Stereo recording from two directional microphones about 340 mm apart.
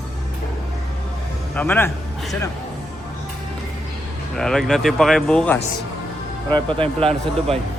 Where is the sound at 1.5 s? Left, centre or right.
Centre.